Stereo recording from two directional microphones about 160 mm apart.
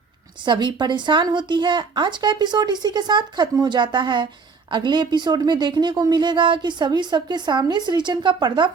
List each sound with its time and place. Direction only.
0.4 s speech: 30° right (ahead or behind)